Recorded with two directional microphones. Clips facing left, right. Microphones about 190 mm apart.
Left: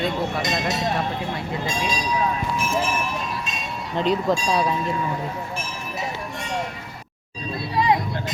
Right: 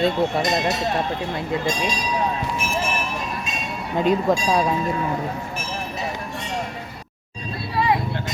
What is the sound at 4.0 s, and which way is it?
Speech, 15° right (ahead or behind).